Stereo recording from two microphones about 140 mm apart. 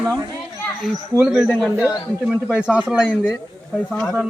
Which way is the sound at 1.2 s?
5° right (ahead or behind).